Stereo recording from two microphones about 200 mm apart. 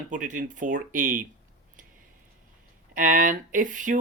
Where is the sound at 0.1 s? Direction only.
40° right (ahead or behind).